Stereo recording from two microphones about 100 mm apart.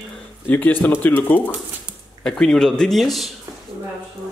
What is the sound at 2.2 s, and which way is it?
A man's voice, 5° left (ahead or behind).